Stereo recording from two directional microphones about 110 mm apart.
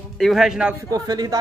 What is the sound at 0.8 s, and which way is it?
Speech, 35° right (ahead or behind).